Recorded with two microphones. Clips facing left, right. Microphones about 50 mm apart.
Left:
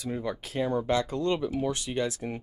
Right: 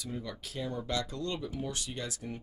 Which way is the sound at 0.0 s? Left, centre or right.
Left.